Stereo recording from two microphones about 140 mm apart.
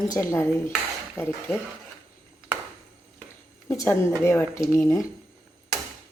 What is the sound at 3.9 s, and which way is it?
Dishes, 20° left (ahead or behind).